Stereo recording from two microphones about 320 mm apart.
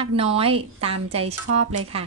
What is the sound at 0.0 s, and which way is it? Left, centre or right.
A woman's voice, centre.